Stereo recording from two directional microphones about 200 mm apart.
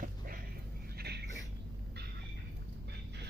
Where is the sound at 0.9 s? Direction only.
55° right (ahead or behind).